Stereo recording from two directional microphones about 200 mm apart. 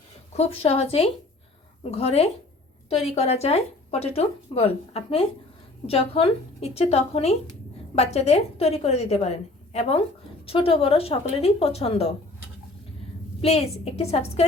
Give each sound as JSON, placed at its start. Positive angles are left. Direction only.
{"t": 0.3, "sound": "a woman's voice", "side_deg": 30}
{"t": 10.4, "sound": "speech", "side_deg": 30}
{"t": 13.4, "sound": "a woman's voice", "side_deg": 30}